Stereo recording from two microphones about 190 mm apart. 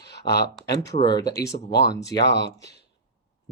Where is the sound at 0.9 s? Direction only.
25° left (ahead or behind).